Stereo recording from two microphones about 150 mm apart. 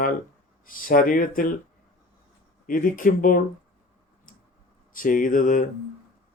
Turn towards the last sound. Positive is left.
turn(degrees=60)  # may be behind; listen again after turning